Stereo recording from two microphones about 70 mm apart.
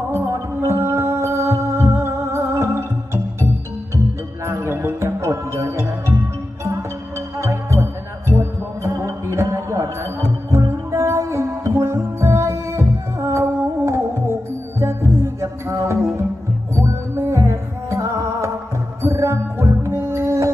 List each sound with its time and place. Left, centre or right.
0.1 s music: right
4.5 s music: right
7.2 s music: right